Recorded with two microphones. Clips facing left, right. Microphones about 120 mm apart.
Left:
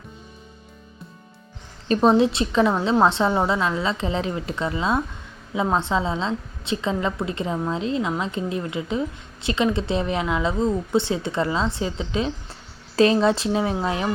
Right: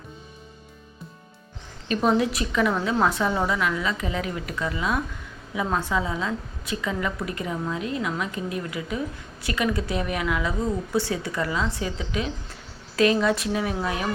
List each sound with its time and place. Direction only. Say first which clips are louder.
1.9 s a woman's voice: left 5 dB; 30° left (ahead or behind)